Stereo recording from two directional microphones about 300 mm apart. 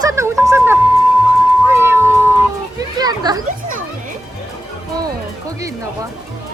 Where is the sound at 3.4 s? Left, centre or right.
Right.